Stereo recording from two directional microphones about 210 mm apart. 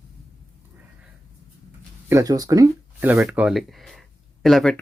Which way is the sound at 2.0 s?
15° right (ahead or behind).